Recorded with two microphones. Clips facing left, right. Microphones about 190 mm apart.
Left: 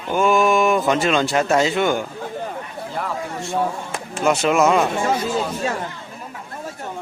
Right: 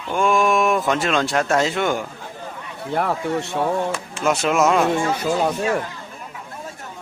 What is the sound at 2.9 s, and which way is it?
Speech, 65° right (ahead or behind).